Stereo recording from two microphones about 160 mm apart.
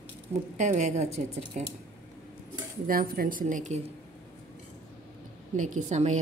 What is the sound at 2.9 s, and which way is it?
Speech, 65° right (ahead or behind).